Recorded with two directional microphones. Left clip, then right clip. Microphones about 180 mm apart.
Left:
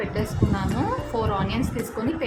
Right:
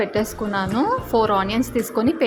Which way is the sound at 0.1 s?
40° right (ahead or behind).